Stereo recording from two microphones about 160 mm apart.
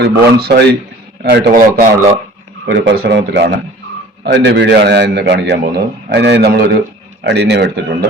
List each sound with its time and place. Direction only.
0.0 s a man's voice: 90° right
1.2 s a man's voice: 80° right
2.7 s a man's voice: 90° right